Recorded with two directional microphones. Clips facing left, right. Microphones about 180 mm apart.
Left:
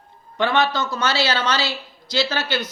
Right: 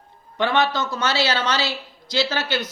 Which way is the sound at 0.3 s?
20° right (ahead or behind).